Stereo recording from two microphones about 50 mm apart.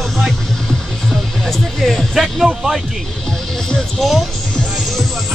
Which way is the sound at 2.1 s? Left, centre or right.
Centre.